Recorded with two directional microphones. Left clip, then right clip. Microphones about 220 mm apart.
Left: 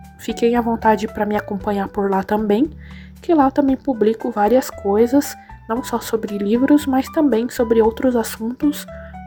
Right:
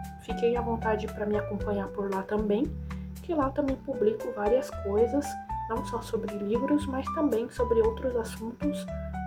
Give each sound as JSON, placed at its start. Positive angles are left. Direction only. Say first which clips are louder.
{"t": 0.3, "sound": "speech", "louder": "left 10 dB", "side_deg": 35}